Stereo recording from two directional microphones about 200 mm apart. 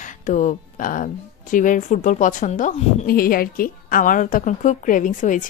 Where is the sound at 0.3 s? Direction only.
40° left (ahead or behind).